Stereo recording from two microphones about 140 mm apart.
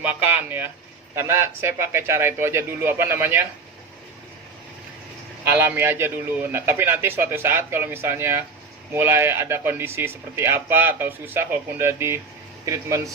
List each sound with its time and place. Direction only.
0.0 s speech: 10° right (ahead or behind)
5.5 s speech: 15° right (ahead or behind)